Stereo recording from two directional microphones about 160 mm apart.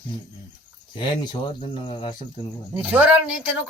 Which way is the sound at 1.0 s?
30° left (ahead or behind).